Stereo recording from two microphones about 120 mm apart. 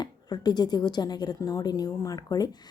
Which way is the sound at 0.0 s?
35° left (ahead or behind).